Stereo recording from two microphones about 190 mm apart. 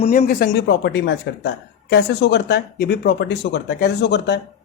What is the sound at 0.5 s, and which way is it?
Speech, 65° left (ahead or behind).